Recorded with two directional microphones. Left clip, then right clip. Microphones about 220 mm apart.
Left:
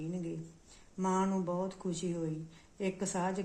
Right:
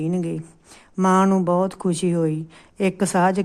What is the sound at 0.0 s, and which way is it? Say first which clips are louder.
A woman's voice: right 15 dB; 40° right (ahead or behind).